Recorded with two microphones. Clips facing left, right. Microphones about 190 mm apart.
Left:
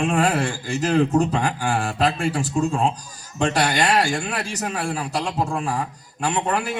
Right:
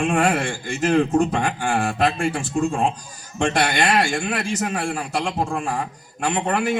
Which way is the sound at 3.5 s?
35° left (ahead or behind).